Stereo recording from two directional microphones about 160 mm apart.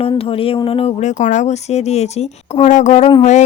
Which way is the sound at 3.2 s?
45° left (ahead or behind).